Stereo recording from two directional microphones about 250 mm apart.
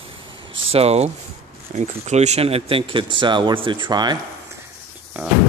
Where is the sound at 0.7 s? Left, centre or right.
Right.